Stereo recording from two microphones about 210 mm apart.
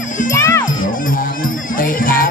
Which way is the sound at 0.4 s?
10° left (ahead or behind).